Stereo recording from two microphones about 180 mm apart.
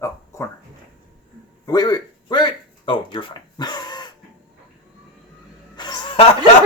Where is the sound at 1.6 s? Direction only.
20° left (ahead or behind).